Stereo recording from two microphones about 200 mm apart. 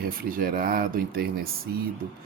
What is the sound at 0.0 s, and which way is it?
Speech, 45° right (ahead or behind).